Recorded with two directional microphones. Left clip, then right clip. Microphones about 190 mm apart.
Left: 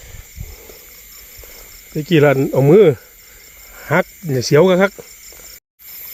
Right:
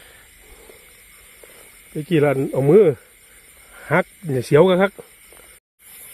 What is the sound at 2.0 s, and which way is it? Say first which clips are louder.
Speech: left 5 dB; 10° left (ahead or behind).